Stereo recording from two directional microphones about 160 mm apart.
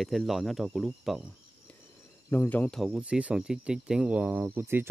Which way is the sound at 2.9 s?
10° right (ahead or behind).